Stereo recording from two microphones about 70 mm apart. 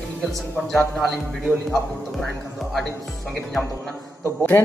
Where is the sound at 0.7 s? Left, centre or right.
Centre.